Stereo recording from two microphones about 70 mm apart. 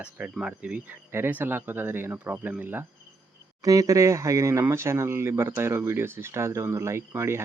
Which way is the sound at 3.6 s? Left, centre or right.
Right.